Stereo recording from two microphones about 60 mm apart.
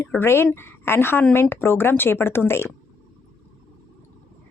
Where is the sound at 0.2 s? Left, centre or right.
Left.